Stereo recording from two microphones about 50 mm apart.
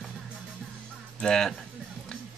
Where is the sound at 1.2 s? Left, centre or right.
Centre.